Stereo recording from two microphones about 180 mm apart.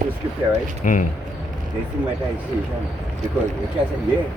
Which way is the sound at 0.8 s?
50° left (ahead or behind).